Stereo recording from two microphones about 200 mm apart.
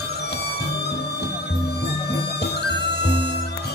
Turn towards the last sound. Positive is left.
turn(degrees=60)  # may be behind; listen again after turning